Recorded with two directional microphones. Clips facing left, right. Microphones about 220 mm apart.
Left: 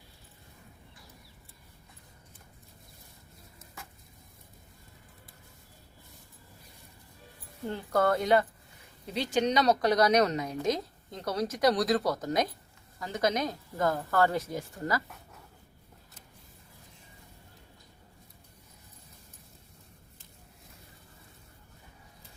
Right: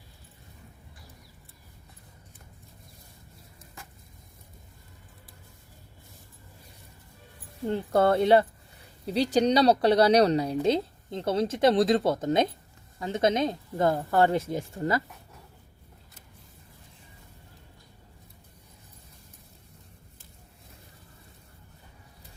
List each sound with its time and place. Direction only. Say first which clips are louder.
7.7 s speech: right 4 dB; 30° right (ahead or behind)